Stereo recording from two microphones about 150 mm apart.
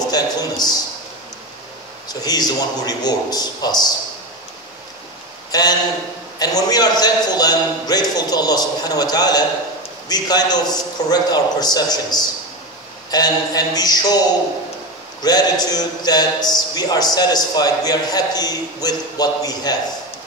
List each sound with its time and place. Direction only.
0.1 s a man's voice: 25° left (ahead or behind)
2.0 s a man's voice: 25° left (ahead or behind)
5.5 s a man's voice: 25° left (ahead or behind)
15.6 s a man's voice: 25° left (ahead or behind)